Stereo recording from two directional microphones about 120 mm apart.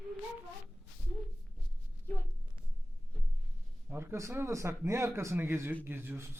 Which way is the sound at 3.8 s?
20° right (ahead or behind).